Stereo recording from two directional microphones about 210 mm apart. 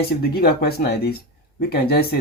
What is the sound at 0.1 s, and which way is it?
Speech, 50° left (ahead or behind).